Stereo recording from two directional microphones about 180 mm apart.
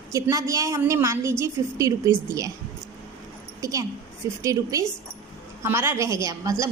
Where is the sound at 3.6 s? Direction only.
20° right (ahead or behind).